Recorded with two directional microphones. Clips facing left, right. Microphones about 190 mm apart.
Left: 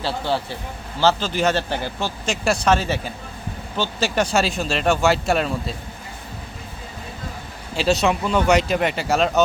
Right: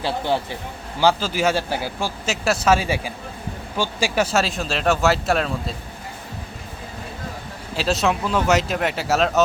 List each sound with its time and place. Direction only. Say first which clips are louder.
0.0 s speech: right 1 dB; 15° right (ahead or behind); by 5.7 s centre (ahead or behind)
7.8 s speech: left 2 dB; centre (ahead or behind)